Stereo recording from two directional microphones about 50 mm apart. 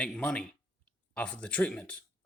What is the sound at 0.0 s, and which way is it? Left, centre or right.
Speech, left.